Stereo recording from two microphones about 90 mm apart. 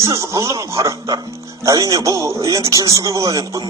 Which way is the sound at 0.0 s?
35° right (ahead or behind).